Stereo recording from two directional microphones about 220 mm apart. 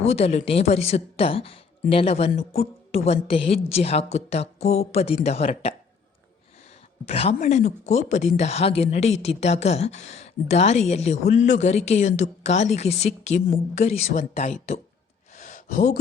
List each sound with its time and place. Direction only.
0.0 s a woman's voice: 30° left (ahead or behind)
7.1 s a woman's voice: 30° left (ahead or behind)
15.4 s gasp: 35° left (ahead or behind)